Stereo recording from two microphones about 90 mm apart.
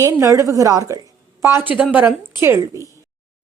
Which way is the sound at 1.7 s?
15° right (ahead or behind).